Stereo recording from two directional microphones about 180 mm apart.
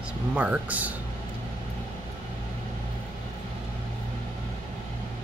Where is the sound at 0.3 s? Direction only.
10° right (ahead or behind).